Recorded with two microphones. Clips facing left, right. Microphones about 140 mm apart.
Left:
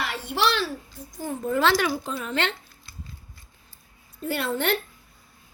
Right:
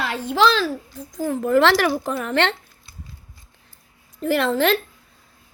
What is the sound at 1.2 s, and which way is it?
A woman's voice, 80° right.